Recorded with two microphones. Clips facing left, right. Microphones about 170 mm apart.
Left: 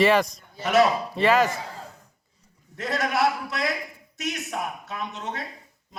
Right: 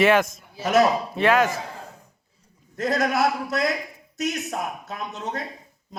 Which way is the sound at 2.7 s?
40° right (ahead or behind).